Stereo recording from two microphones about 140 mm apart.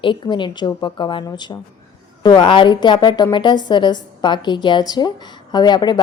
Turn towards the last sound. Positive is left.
turn(degrees=30)  # may be behind; listen again after turning